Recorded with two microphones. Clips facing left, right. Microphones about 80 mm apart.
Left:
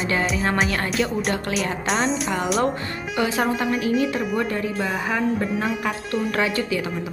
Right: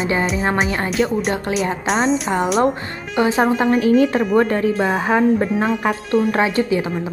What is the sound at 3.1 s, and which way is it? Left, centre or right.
Speech, right.